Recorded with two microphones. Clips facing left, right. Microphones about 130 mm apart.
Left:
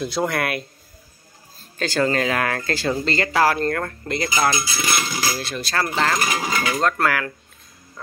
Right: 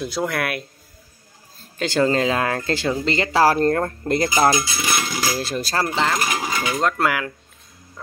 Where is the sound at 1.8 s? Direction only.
20° right (ahead or behind).